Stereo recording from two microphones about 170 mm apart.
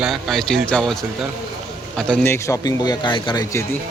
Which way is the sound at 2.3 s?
15° left (ahead or behind).